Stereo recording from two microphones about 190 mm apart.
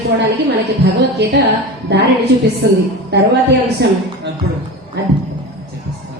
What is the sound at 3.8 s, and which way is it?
Speech, 60° right (ahead or behind).